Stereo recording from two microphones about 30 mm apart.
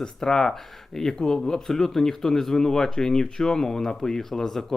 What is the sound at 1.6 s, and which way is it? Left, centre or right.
Speech, centre.